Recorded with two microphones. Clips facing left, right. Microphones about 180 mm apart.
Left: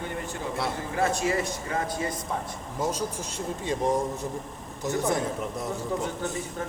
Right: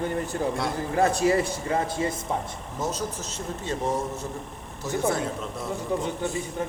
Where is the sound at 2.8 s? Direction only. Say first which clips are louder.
Left 1 dB; 10° left (ahead or behind).